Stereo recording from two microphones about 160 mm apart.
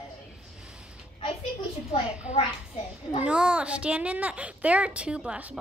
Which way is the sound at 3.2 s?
5° right (ahead or behind).